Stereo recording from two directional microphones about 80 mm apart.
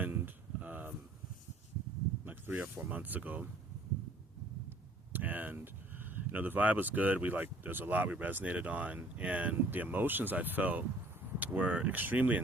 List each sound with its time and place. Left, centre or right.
0.6 s a sound: centre
2.2 s speech: centre
5.1 s speech: right